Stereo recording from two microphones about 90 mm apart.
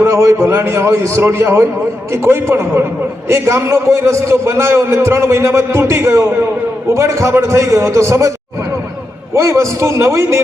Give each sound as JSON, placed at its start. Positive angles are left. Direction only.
{"t": 0.0, "sound": "a man's voice", "side_deg": -30}
{"t": 9.3, "sound": "a man's voice", "side_deg": -35}